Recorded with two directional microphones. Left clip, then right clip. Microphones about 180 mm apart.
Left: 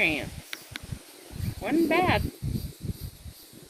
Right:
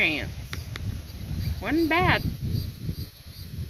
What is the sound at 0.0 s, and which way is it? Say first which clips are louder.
Speech: right 1 dB; 25° left (ahead or behind).